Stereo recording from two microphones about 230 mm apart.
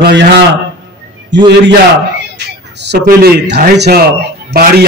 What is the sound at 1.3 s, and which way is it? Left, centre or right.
A man's voice, right.